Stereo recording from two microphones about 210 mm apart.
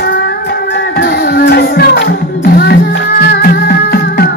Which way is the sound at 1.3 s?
45° left (ahead or behind).